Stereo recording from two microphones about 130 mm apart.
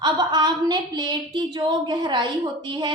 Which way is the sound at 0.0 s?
30° right (ahead or behind).